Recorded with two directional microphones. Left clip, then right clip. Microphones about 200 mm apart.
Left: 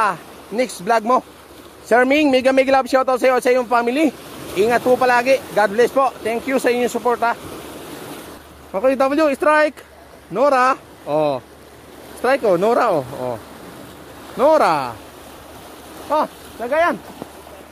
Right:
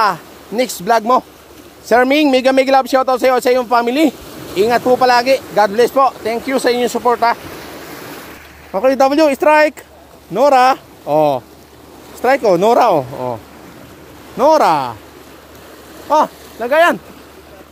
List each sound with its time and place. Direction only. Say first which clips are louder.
0.0 s speech: right 4 dB; 15° right (ahead or behind)
8.7 s speech: right 5 dB; 10° right (ahead or behind)
14.4 s speech: right 3 dB; 10° right (ahead or behind)
16.6 s speech: right 6 dB; 25° right (ahead or behind)